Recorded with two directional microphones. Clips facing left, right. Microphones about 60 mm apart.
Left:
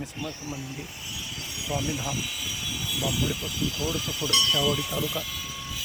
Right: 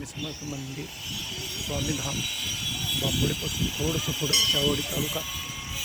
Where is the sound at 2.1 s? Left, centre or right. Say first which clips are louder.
Left 1 dB; centre.